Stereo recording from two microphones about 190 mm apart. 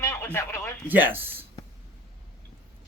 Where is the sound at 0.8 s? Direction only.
10° right (ahead or behind).